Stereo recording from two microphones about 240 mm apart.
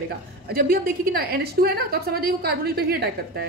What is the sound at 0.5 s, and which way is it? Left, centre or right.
A woman's voice, right.